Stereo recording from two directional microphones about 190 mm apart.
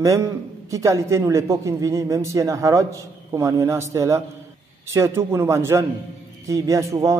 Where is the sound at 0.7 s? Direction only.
15° right (ahead or behind).